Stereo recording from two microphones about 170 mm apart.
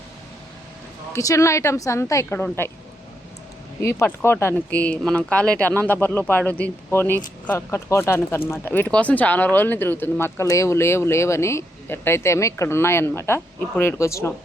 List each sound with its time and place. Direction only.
1.1 s speech: 20° left (ahead or behind)
3.8 s speech: 15° left (ahead or behind)